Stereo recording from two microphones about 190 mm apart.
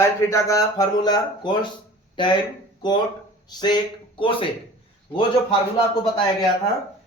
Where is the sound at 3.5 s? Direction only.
20° left (ahead or behind).